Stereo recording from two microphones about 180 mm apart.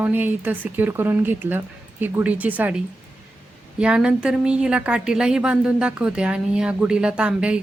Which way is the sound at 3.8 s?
5° right (ahead or behind).